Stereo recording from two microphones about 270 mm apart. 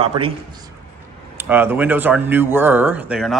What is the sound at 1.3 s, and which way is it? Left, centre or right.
Speech, centre.